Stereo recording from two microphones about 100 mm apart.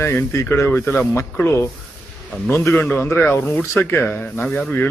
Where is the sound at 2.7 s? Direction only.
15° left (ahead or behind).